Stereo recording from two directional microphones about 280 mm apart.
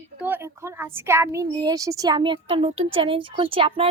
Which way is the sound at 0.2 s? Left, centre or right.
Centre.